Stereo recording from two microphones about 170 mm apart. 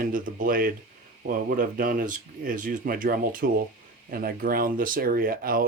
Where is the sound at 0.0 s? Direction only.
55° right (ahead or behind).